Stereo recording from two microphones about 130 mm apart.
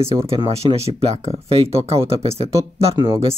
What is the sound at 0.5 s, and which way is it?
Speech, 50° right (ahead or behind).